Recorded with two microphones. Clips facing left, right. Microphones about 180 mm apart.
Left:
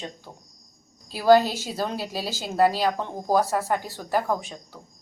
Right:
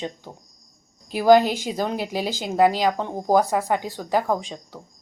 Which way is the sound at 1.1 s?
15° right (ahead or behind).